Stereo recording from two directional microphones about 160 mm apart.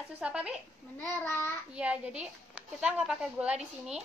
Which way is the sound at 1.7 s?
5° right (ahead or behind).